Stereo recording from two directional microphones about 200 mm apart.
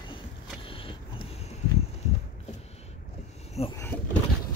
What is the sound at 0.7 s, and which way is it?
Vehicle, 25° left (ahead or behind).